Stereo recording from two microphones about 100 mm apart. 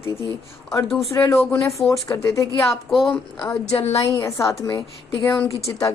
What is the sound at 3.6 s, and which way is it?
Speech, 90° left.